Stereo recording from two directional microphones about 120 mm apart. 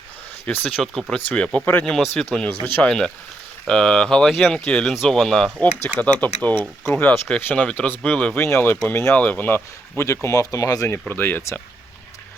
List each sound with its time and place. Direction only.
0.6 s speech: centre (ahead or behind)
1.5 s speech: 15° left (ahead or behind)
1.8 s speech: 5° left (ahead or behind)
8.4 s speech: 20° left (ahead or behind)